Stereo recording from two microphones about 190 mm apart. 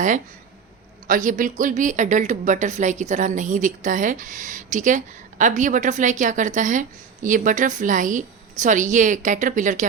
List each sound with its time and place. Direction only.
1.0 s speech: 45° right (ahead or behind)